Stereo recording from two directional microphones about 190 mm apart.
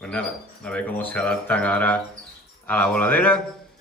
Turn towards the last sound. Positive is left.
turn(degrees=5)  # may be behind; listen again after turning